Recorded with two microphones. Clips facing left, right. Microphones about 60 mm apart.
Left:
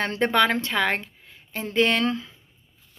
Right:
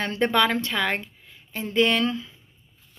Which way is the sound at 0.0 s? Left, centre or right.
Left.